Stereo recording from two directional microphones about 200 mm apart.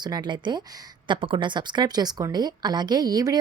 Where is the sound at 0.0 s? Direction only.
20° right (ahead or behind).